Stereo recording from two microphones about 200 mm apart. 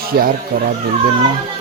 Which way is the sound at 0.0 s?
50° right (ahead or behind).